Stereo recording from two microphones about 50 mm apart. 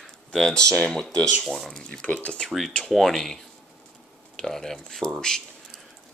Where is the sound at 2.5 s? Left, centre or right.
Centre.